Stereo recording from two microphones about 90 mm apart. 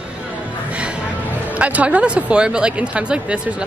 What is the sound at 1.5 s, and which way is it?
Speech, 15° right (ahead or behind).